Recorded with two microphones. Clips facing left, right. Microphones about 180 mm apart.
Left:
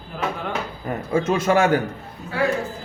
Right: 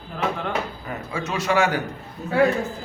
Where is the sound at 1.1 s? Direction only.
45° left (ahead or behind).